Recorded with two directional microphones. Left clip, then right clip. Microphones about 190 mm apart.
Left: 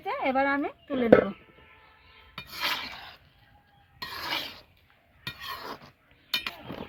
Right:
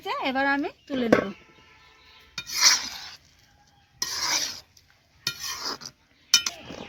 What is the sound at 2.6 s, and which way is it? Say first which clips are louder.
Filing: right 10 dB; 15° left (ahead or behind).